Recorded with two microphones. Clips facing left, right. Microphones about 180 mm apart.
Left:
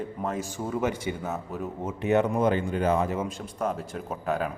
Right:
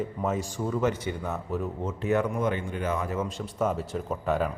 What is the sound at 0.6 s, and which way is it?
A man's voice, 10° left (ahead or behind).